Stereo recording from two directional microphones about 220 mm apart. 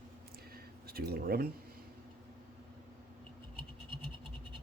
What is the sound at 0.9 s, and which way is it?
Speech, 45° right (ahead or behind).